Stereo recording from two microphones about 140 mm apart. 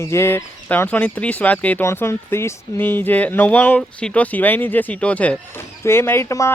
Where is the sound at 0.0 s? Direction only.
20° left (ahead or behind).